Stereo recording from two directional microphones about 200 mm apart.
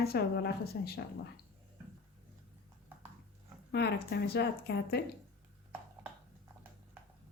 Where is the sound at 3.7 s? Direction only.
55° left (ahead or behind).